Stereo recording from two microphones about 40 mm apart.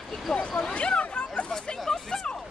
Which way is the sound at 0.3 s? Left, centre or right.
Centre.